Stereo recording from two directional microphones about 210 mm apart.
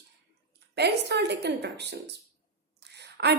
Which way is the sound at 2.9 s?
50° right (ahead or behind).